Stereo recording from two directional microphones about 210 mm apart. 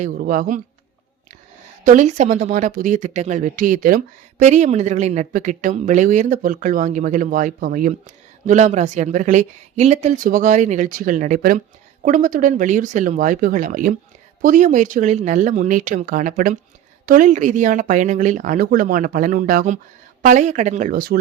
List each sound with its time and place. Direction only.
0.0 s speech: 40° right (ahead or behind)
1.8 s speech: 35° right (ahead or behind)